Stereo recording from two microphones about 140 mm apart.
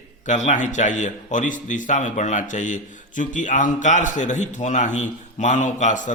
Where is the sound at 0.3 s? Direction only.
55° left (ahead or behind).